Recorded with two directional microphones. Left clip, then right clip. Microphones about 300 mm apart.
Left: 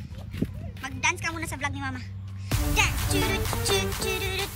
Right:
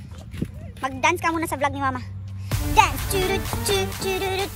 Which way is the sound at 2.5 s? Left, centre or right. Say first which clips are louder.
Right 7 dB; centre.